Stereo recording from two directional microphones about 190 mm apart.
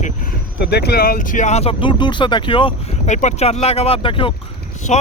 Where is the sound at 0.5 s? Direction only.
60° left (ahead or behind).